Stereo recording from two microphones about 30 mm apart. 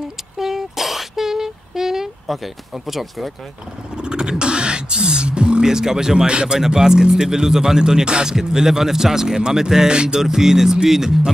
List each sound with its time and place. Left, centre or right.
0.4 s a sound: centre
2.3 s speech: centre
3.9 s speech: right
6.6 s speech: centre
8.4 s speech: centre
10.2 s speech: centre